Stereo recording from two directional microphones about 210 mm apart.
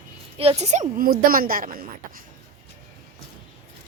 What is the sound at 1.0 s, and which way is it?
Speech, 45° right (ahead or behind).